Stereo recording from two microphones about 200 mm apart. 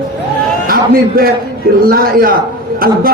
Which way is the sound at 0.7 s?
45° right (ahead or behind).